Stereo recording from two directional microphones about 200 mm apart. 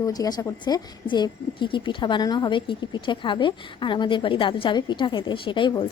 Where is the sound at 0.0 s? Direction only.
20° left (ahead or behind).